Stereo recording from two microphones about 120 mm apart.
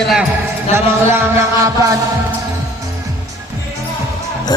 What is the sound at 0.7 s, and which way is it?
Music, 20° right (ahead or behind).